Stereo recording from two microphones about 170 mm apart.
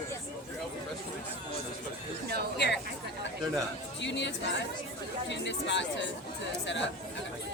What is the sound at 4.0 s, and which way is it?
Speech, 90° left.